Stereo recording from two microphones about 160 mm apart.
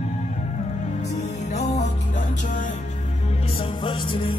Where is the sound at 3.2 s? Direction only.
35° left (ahead or behind).